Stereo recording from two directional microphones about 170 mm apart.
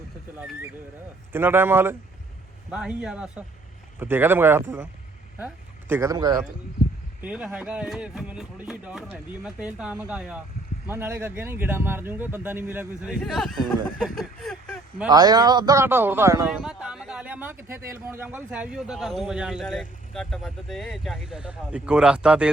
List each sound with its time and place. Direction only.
1.3 s speech: 10° right (ahead or behind)
5.9 s speech: 20° right (ahead or behind)
7.2 s speech: 10° right (ahead or behind)
13.2 s speech: centre (ahead or behind)
15.1 s speech: 25° right (ahead or behind)
16.5 s speech: 5° right (ahead or behind)